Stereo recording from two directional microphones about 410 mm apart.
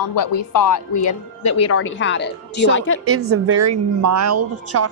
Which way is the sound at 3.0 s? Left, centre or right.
Right.